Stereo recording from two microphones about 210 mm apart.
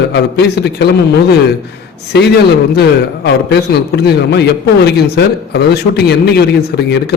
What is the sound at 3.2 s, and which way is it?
A man's voice, 50° left (ahead or behind).